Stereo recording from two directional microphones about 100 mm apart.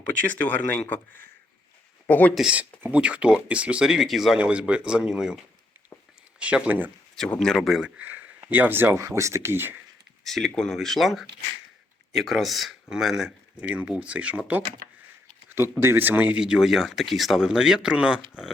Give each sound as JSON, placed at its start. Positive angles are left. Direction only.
{"t": 0.2, "sound": "speech", "side_deg": 15}
{"t": 2.3, "sound": "speech", "side_deg": -10}
{"t": 7.3, "sound": "speech", "side_deg": 5}
{"t": 10.2, "sound": "speech", "side_deg": 5}
{"t": 15.4, "sound": "a sound", "side_deg": -25}
{"t": 15.8, "sound": "speech", "side_deg": -25}